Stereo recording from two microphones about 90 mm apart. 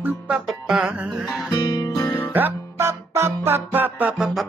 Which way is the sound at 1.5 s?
50° left (ahead or behind).